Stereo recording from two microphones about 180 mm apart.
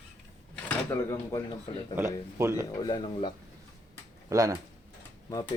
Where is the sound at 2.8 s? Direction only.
25° left (ahead or behind).